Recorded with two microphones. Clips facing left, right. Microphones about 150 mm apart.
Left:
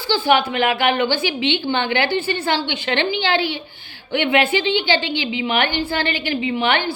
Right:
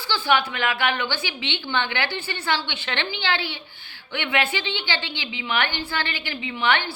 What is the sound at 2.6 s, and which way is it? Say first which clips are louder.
Speech: left 8 dB; 15° left (ahead or behind).